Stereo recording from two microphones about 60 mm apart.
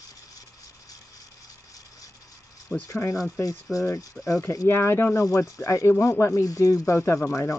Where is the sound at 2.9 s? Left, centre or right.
Left.